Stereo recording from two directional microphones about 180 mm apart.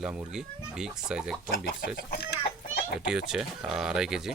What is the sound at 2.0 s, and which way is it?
Speech, 60° left (ahead or behind).